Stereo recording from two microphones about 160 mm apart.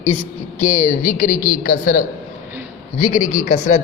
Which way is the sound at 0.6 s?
45° left (ahead or behind).